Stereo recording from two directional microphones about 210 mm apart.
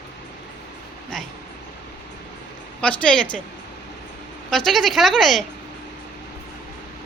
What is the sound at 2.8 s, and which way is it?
Speech, 5° left (ahead or behind).